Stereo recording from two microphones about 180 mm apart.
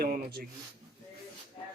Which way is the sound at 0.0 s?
55° right (ahead or behind).